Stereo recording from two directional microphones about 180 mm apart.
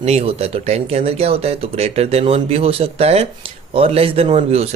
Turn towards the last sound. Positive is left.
turn(degrees=-35)  # may be behind; listen again after turning